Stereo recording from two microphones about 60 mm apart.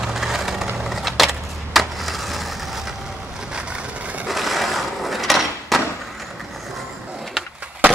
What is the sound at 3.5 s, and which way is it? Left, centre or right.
Vehicle, centre.